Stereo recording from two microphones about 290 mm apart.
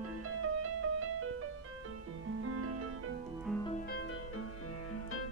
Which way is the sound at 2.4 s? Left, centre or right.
Right.